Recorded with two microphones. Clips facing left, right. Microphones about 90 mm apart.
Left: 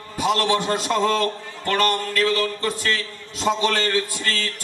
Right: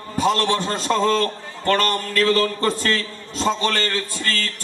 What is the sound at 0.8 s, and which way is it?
A man's voice, 35° right (ahead or behind).